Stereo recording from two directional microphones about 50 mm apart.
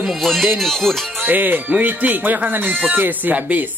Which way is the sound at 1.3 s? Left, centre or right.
Right.